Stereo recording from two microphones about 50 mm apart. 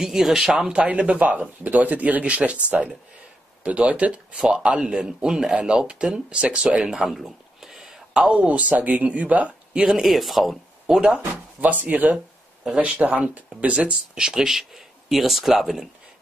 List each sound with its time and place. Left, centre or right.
0.0 s speech: centre
0.5 s speech: centre
3.6 s speech: right
6.8 s a sound: centre
8.3 s speech: right
9.8 s speech: centre
10.9 s speech: centre
11.6 s speech: right
12.6 s speech: centre
13.8 s speech: centre